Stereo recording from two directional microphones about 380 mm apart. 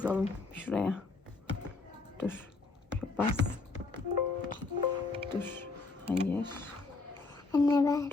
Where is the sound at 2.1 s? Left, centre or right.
Centre.